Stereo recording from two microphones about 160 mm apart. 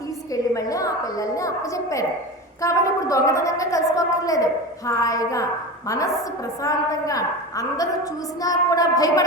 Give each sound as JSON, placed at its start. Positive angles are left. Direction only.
{"t": 0.5, "sound": "a woman's voice", "side_deg": 20}
{"t": 6.6, "sound": "a woman's voice", "side_deg": 20}